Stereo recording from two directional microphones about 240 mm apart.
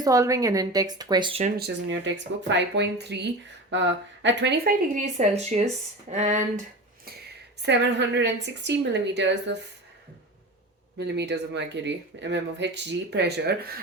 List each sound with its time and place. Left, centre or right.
0.0 s speech: centre
1.5 s a woman's voice: right
7.6 s a woman's voice: right
10.9 s a woman's voice: right